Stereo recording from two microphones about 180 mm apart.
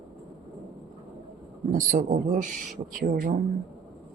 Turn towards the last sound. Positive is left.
turn(degrees=-50)  # may be behind; listen again after turning